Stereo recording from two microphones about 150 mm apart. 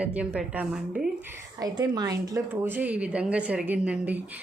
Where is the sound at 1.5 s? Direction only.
25° right (ahead or behind).